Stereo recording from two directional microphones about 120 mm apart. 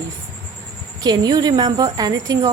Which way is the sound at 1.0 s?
35° right (ahead or behind).